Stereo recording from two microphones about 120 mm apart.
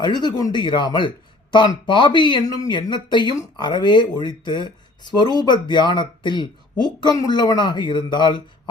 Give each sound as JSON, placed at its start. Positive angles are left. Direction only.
{"t": 0.0, "sound": "speech", "side_deg": 40}